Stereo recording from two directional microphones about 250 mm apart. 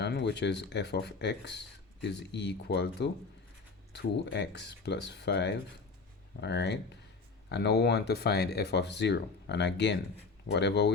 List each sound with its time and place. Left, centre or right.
0.0 s speech: left